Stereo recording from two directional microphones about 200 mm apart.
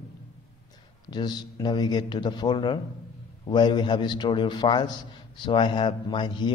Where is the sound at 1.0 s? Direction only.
20° left (ahead or behind).